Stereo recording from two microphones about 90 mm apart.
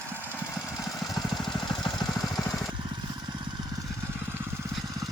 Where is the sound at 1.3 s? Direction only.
5° left (ahead or behind).